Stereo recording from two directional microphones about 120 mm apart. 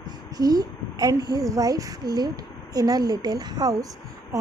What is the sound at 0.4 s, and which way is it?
A woman's voice, 30° right (ahead or behind).